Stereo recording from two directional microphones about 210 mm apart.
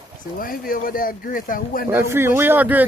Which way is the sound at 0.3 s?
45° left (ahead or behind).